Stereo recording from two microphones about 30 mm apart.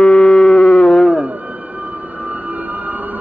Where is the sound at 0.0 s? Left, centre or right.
Left.